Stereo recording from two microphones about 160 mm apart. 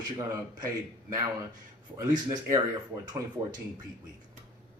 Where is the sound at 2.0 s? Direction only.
20° right (ahead or behind).